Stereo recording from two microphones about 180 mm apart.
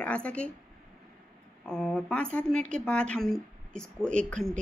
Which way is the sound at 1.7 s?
5° left (ahead or behind).